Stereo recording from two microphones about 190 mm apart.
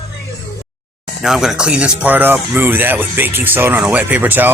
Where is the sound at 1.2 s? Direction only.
Centre (ahead or behind).